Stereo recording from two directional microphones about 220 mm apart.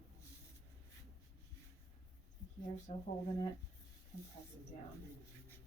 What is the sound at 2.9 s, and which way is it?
Speech, 30° left (ahead or behind).